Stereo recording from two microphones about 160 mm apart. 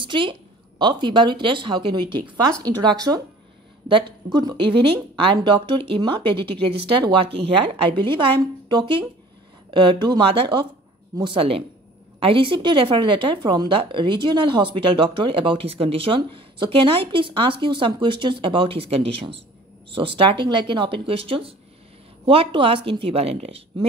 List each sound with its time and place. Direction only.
0.0 s a woman's voice: 30° right (ahead or behind)
20.3 s speech: 30° right (ahead or behind)